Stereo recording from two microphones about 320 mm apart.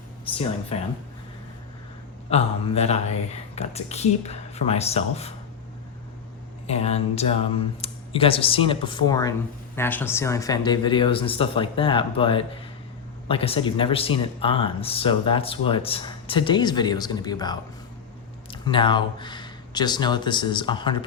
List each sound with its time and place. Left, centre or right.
0.7 s speech: centre
2.3 s speech: centre
6.7 s speech: centre